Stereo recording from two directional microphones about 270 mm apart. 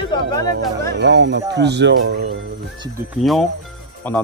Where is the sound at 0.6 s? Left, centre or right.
Right.